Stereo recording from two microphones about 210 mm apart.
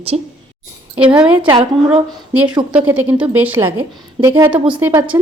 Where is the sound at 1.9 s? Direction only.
5° right (ahead or behind).